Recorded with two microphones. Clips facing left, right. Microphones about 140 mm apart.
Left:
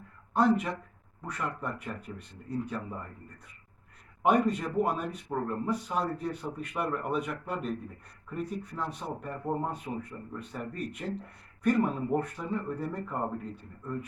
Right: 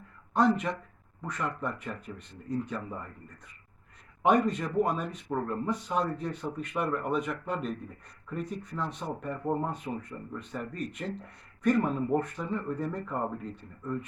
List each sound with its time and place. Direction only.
0.3 s speech: 5° left (ahead or behind)
4.2 s speech: 5° left (ahead or behind)